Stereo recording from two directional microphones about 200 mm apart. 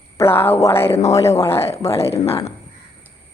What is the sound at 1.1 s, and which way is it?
Speech, 15° left (ahead or behind).